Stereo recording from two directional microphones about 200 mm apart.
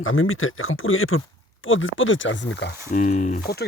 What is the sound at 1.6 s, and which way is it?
Speech, 75° left (ahead or behind).